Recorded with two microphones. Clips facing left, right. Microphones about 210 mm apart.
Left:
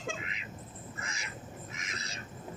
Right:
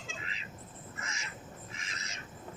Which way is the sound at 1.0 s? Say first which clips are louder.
Even; 35° left (ahead or behind).